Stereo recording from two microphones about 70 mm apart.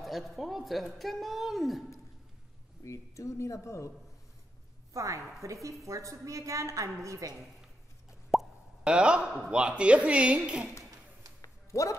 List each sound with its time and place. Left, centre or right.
0.0 s a woman's voice: centre
2.8 s speech: left
4.9 s a woman's voice: right
8.3 s plop: centre
9.5 s a woman's voice: centre
11.4 s a sound: left